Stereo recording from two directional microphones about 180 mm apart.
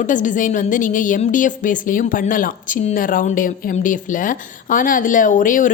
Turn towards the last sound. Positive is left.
turn(degrees=50)  # may be behind; listen again after turning